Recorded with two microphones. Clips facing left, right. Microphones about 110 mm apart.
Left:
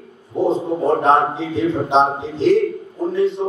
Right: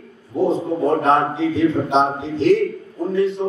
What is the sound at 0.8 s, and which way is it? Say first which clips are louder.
A man's voice: left 2 dB; 30° left (ahead or behind).